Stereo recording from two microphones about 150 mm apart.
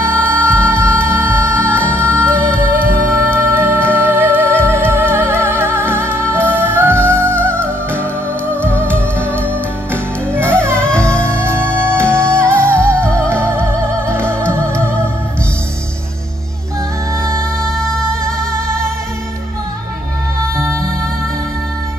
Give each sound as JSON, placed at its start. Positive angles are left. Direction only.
{"t": 0.0, "sound": "music", "side_deg": -15}